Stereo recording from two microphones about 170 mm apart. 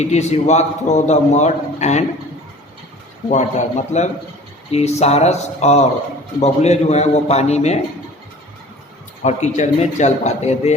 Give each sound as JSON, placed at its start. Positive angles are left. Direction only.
{"t": 0.0, "sound": "a man's voice", "side_deg": 40}
{"t": 3.2, "sound": "a man's voice", "side_deg": 45}
{"t": 9.2, "sound": "a man's voice", "side_deg": 45}